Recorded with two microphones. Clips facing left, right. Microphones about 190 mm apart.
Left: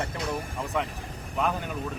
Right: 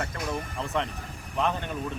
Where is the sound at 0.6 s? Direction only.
5° left (ahead or behind).